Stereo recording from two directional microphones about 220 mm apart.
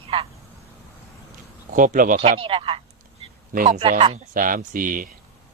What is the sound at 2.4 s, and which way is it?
Speech, 25° right (ahead or behind).